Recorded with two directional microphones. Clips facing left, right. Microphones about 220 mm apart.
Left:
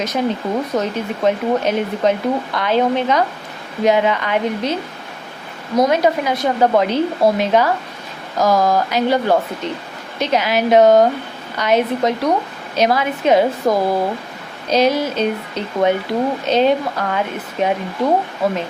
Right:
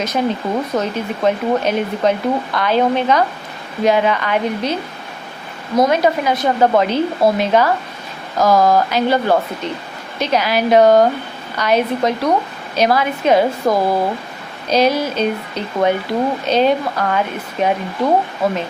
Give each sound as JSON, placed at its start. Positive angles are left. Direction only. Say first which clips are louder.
{"t": 0.0, "sound": "a woman's voice", "louder": "right 1 dB", "side_deg": 15}